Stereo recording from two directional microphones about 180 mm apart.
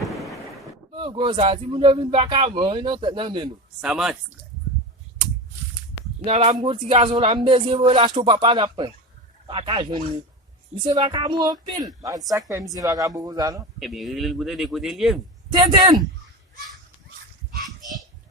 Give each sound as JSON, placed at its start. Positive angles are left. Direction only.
{"t": 0.0, "sound": "a sound", "side_deg": 0}
{"t": 0.9, "sound": "a woman's voice", "side_deg": -30}
{"t": 3.8, "sound": "speech", "side_deg": -5}
{"t": 6.2, "sound": "a woman's voice", "side_deg": -35}
{"t": 13.7, "sound": "speech", "side_deg": 0}
{"t": 15.7, "sound": "a woman's voice", "side_deg": -25}